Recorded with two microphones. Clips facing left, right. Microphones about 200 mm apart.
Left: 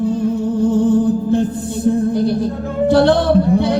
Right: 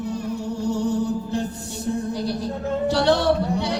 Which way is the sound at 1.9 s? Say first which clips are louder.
Left 10 dB; 55° left (ahead or behind).